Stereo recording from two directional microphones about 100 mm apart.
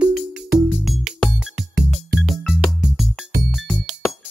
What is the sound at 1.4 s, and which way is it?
Music, 5° right (ahead or behind).